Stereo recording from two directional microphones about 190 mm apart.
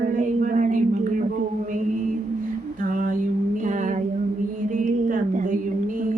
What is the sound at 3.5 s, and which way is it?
Speech, 40° right (ahead or behind).